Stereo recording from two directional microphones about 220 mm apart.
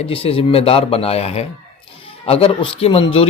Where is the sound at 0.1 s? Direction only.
25° left (ahead or behind).